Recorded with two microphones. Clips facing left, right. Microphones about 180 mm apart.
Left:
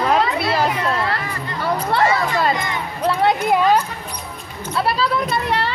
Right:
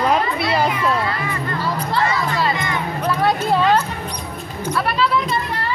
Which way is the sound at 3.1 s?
20° left (ahead or behind).